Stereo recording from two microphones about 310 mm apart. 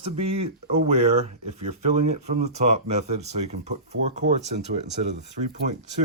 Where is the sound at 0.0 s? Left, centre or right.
Centre.